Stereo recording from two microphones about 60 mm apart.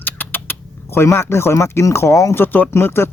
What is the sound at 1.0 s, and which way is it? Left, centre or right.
Speech, left.